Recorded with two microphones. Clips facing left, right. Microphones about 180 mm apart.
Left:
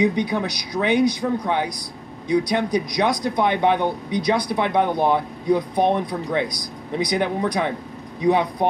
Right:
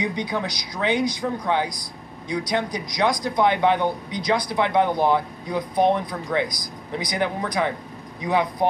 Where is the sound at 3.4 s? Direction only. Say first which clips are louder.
Even; 20° left (ahead or behind).